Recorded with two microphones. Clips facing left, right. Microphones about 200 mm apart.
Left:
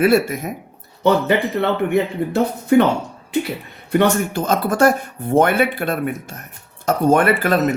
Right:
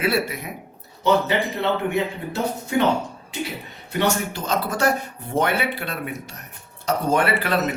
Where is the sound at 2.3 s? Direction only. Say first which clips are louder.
Left 10 dB; 55° left (ahead or behind).